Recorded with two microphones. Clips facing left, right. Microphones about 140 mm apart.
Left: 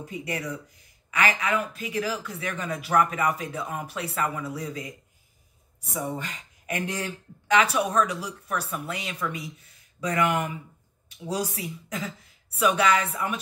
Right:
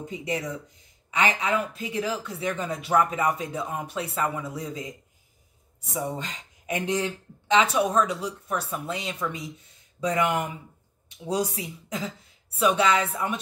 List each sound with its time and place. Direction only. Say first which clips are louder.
0.0 s speech: right 2 dB; 20° right (ahead or behind)